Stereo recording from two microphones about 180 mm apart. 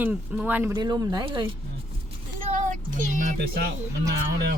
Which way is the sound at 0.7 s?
20° right (ahead or behind).